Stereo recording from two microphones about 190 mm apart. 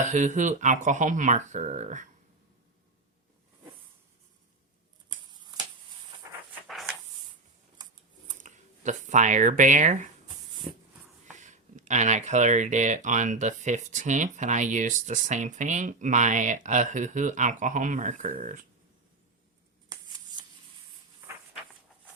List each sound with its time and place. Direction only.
0.0 s speech: 40° right (ahead or behind)
5.0 s a sound: 20° right (ahead or behind)
8.4 s speech: 40° right (ahead or behind)
11.3 s speech: 40° right (ahead or behind)